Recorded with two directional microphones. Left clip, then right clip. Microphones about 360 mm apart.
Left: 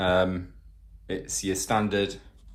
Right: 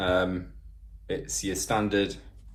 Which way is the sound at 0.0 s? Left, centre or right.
Left.